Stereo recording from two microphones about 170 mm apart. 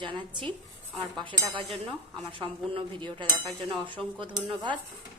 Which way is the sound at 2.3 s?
30° right (ahead or behind).